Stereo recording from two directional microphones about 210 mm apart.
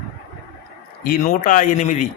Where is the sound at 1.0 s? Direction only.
45° left (ahead or behind).